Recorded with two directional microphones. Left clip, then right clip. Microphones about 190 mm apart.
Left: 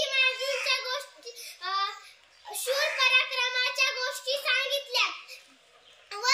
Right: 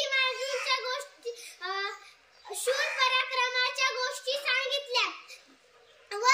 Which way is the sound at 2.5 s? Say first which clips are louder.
Left 1 dB; 10° right (ahead or behind).